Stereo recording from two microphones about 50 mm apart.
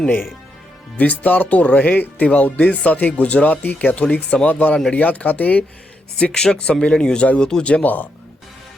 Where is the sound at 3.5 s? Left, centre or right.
Left.